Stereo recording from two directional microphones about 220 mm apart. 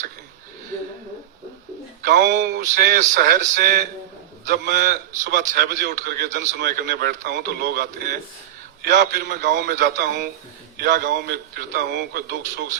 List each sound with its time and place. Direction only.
2.0 s a man's voice: 50° right (ahead or behind)